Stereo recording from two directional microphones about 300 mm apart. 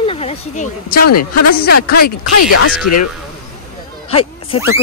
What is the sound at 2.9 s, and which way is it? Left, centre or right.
Speech, left.